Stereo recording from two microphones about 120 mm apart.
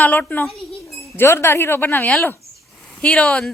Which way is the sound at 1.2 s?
20° left (ahead or behind).